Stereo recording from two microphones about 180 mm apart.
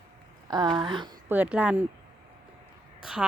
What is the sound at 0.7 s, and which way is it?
Speech, 25° right (ahead or behind).